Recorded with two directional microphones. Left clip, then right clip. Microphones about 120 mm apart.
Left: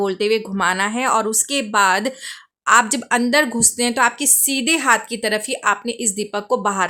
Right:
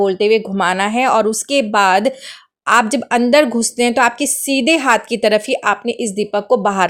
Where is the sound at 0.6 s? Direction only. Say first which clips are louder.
Right 4 dB; 35° right (ahead or behind).